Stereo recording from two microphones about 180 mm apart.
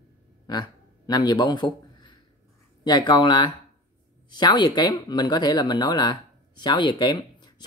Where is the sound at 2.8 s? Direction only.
25° left (ahead or behind).